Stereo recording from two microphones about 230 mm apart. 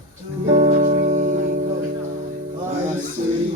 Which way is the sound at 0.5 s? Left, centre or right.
Right.